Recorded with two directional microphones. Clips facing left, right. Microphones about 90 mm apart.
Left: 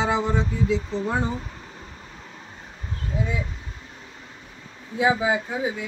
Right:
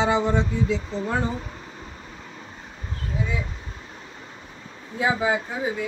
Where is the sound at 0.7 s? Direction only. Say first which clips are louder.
Left 1 dB; 15° left (ahead or behind).